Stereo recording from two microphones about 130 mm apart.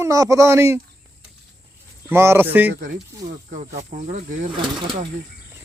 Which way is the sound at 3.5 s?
60° right (ahead or behind).